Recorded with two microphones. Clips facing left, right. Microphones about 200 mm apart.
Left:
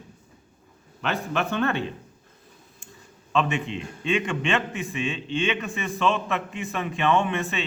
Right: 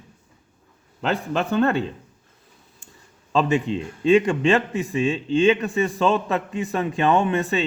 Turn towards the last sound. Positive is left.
turn(degrees=-40)  # may be behind; listen again after turning